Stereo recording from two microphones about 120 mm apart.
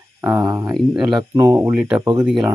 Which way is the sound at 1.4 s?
25° right (ahead or behind).